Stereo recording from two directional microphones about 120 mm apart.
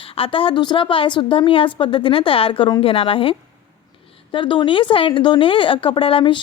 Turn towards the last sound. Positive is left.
turn(degrees=45)  # may be behind; listen again after turning